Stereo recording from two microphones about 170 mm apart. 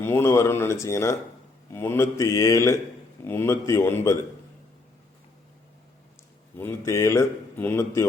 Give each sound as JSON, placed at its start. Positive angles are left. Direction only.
{"t": 0.0, "sound": "speech", "side_deg": 15}
{"t": 6.6, "sound": "speech", "side_deg": 15}